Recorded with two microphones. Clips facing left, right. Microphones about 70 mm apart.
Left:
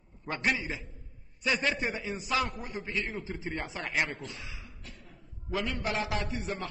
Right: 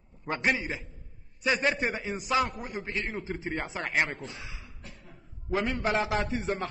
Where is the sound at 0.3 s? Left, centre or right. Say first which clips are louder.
Right 2 dB; centre.